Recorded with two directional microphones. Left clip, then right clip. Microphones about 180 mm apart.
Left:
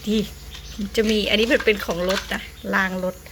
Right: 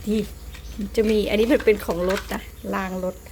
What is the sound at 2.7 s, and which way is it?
Speech, 5° right (ahead or behind).